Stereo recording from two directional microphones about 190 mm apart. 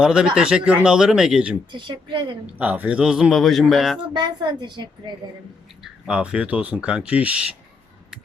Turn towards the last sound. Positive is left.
turn(degrees=-5)  # may be behind; listen again after turning